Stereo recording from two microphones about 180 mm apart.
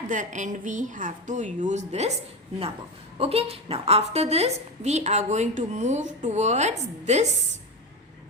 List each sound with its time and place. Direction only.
0.1 s a woman's voice: 45° right (ahead or behind)
3.2 s a woman's voice: 35° right (ahead or behind)